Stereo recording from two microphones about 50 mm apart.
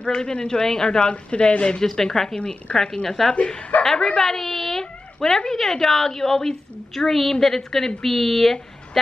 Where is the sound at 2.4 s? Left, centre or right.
Left.